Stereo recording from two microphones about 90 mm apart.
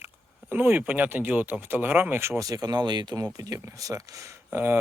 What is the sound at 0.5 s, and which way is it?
Speech, 20° right (ahead or behind).